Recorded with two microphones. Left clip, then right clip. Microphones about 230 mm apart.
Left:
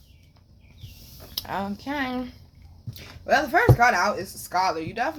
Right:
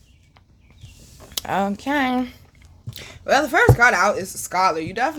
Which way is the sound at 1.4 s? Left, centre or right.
Right.